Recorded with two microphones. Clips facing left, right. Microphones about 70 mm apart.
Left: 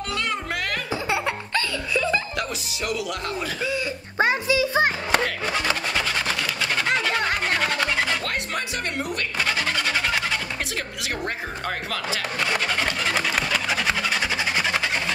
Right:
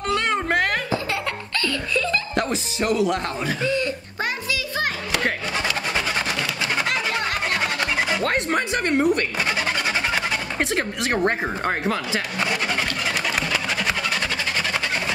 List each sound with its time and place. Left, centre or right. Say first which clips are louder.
0.1 s music: right 7 dB; right
1.1 s baby laughter: left 2 dB; centre
2.3 s speech: right 5 dB; right
3.6 s speech: right 4 dB; centre
4.2 s music: left 7 dB; left
7.6 s music: even; centre
8.2 s music: right 6 dB; right
9.4 s music: right 1 dB; centre
10.6 s speech: right 7 dB; right
11.9 s speech: right 3 dB; right
13.5 s a sound: even; centre